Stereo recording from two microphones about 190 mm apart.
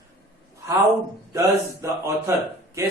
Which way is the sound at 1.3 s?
15° right (ahead or behind).